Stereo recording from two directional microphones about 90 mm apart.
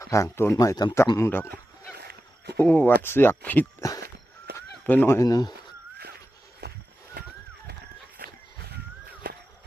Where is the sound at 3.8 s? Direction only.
35° left (ahead or behind).